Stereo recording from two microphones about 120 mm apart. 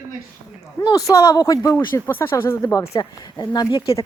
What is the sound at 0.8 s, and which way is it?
Speech, 30° left (ahead or behind).